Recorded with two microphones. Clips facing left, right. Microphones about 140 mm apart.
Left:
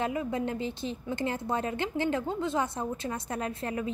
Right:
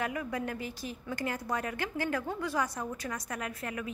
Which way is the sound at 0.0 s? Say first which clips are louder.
Left 4 dB; 25° left (ahead or behind).